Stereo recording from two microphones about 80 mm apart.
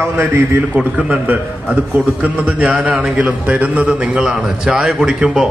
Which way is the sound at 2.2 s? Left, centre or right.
Centre.